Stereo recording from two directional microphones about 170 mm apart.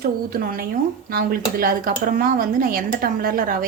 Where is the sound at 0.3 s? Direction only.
60° right (ahead or behind).